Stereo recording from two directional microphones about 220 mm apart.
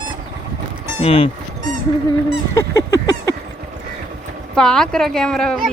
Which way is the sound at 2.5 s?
15° left (ahead or behind).